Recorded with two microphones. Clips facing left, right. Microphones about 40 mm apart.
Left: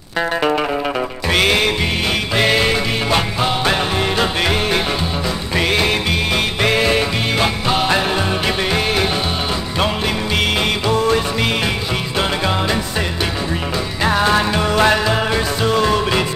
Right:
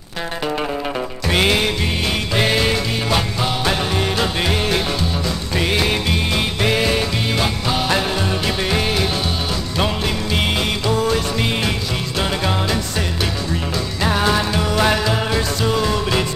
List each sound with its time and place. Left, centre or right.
1.3 s music: centre
10.9 s music: centre
14.0 s music: centre